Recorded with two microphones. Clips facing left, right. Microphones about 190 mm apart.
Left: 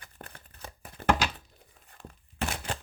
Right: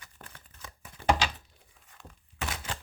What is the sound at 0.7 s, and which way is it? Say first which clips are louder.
Crumpling: left 4 dB; 40° left (ahead or behind).